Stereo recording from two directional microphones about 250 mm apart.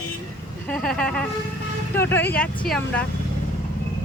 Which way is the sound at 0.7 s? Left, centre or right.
Centre.